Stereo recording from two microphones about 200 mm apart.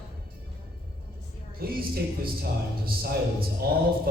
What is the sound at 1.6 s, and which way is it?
Speech, 50° right (ahead or behind).